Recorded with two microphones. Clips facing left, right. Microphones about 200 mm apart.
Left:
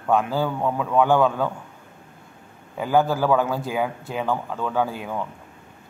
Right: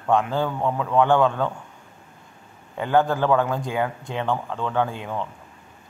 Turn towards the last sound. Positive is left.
turn(degrees=5)  # may be behind; listen again after turning